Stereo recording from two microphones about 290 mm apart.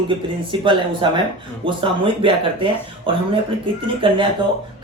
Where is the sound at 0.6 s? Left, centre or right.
Centre.